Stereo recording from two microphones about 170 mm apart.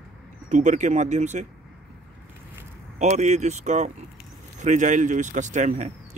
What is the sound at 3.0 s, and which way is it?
Speech, 45° right (ahead or behind).